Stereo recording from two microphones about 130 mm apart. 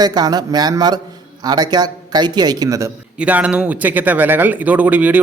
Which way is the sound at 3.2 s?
10° right (ahead or behind).